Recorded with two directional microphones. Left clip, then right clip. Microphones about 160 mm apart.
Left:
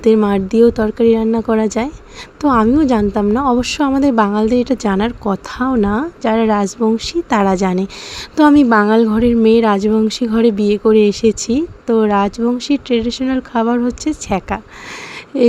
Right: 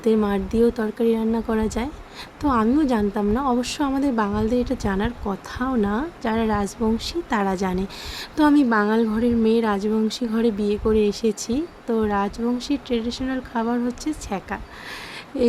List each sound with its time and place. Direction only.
0.0 s a woman's voice: 45° left (ahead or behind)